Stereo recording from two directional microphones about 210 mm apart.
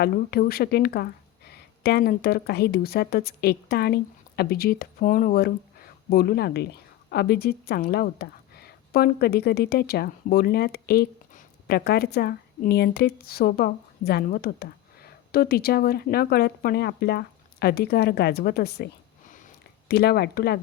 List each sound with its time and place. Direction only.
0.0 s a woman's voice: 45° left (ahead or behind)
19.9 s a woman's voice: 50° left (ahead or behind)